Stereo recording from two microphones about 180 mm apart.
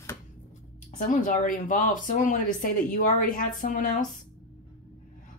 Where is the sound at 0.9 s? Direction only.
45° left (ahead or behind).